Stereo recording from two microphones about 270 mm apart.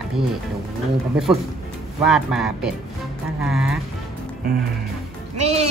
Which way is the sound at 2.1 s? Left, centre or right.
Centre.